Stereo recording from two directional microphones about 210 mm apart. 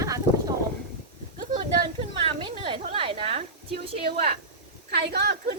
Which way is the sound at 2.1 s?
25° right (ahead or behind).